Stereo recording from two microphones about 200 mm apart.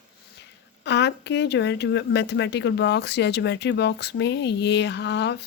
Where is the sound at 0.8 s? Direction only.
60° left (ahead or behind).